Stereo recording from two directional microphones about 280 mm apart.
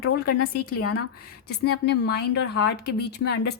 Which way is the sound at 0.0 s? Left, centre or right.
Left.